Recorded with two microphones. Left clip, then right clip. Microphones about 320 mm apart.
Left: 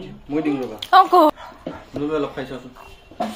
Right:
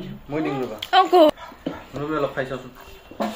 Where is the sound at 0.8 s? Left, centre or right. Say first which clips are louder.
Left 2 dB; centre.